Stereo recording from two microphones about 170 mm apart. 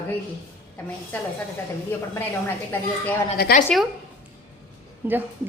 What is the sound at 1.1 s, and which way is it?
Speech, 10° left (ahead or behind).